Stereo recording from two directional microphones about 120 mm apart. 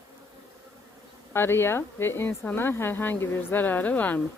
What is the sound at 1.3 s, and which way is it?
Speech, 20° left (ahead or behind).